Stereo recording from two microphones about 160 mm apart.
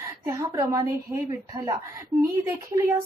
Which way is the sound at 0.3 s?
25° right (ahead or behind).